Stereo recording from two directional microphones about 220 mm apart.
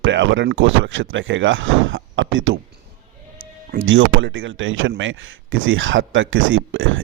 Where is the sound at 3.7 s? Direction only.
60° right (ahead or behind).